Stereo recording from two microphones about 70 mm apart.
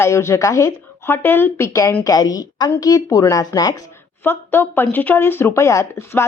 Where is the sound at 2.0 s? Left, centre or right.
Left.